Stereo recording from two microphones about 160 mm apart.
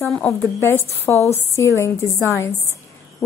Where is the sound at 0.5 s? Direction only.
15° left (ahead or behind).